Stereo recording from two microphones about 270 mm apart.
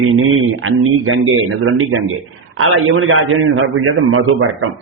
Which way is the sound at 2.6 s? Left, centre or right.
Right.